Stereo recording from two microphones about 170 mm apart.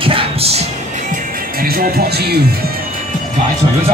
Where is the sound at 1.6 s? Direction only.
60° right (ahead or behind).